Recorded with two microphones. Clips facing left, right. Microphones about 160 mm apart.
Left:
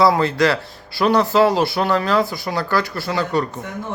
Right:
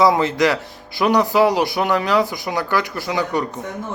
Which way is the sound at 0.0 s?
20° right (ahead or behind).